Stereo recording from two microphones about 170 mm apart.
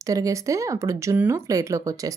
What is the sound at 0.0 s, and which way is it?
A woman's voice, 20° right (ahead or behind).